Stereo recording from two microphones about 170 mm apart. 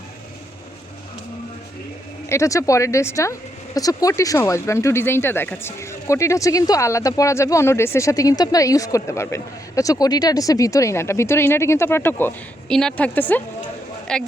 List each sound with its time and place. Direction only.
2.3 s a woman's voice: 20° left (ahead or behind)